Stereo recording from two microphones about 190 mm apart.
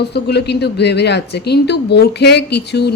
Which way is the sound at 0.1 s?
60° left (ahead or behind).